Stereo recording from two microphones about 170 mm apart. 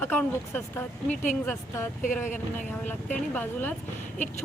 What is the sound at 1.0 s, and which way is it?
Speech, 45° left (ahead or behind).